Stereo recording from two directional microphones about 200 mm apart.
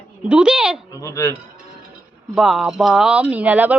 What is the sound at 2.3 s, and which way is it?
A woman's voice, centre (ahead or behind).